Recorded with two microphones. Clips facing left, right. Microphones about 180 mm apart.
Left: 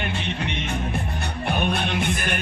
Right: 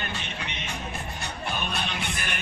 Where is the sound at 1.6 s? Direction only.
55° left (ahead or behind).